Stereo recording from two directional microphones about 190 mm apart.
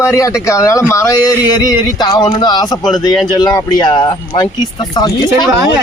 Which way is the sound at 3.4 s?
20° left (ahead or behind).